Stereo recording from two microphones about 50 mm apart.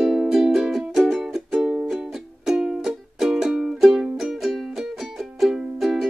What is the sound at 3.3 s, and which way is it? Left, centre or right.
Music, centre.